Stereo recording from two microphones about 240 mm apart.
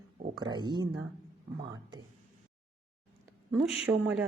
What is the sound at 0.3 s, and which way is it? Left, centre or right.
Speech, centre.